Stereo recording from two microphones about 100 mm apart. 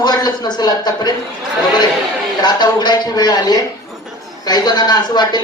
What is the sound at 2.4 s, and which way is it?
A man's voice, 45° left (ahead or behind).